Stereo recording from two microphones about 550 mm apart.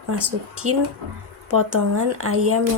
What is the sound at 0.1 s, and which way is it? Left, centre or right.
Speech, right.